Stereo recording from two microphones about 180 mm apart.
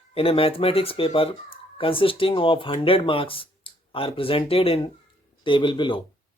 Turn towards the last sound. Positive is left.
turn(degrees=25)  # may be behind; listen again after turning